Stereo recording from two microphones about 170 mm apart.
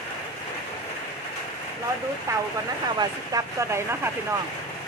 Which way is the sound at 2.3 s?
20° right (ahead or behind).